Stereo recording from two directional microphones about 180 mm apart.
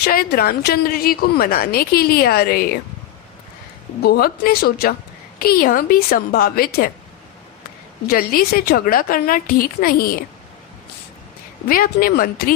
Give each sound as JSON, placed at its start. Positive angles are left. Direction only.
{"t": 0.0, "sound": "a woman's voice", "side_deg": 55}
{"t": 4.0, "sound": "a woman's voice", "side_deg": 60}
{"t": 8.0, "sound": "a woman's voice", "side_deg": 55}
{"t": 11.7, "sound": "a woman's voice", "side_deg": 55}